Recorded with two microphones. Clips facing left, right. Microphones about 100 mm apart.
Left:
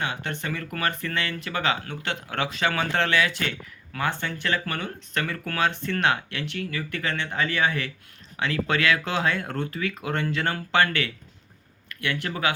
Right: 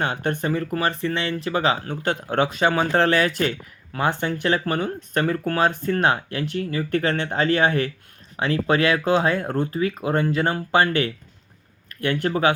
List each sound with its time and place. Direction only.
0.0 s speech: 45° right (ahead or behind)
4.0 s speech: 20° right (ahead or behind)
4.6 s speech: 35° right (ahead or behind)
6.9 s speech: 50° right (ahead or behind)
8.4 s speech: 30° right (ahead or behind)